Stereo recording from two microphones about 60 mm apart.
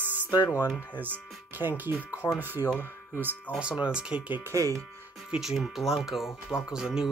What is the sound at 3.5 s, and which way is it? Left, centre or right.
Speech, centre.